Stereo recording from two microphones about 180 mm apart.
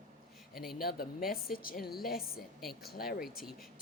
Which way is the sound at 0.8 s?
55° left (ahead or behind).